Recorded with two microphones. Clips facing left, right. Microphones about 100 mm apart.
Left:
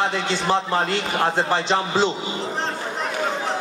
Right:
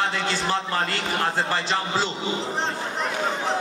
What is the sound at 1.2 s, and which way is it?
Speech, 25° left (ahead or behind).